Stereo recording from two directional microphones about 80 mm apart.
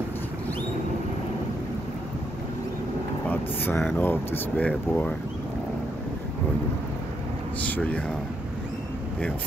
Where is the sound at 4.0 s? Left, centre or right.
Left.